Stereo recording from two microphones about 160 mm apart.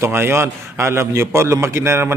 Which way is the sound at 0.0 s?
15° right (ahead or behind).